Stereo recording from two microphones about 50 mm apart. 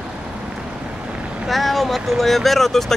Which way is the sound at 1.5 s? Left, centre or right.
Centre.